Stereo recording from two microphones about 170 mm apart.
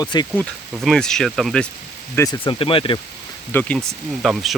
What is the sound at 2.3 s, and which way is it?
Speech, 30° left (ahead or behind).